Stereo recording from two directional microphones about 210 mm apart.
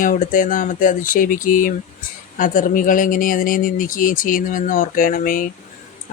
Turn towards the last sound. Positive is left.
turn(degrees=40)  # may be behind; listen again after turning